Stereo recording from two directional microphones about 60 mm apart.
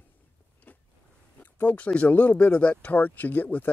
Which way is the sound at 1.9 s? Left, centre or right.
Left.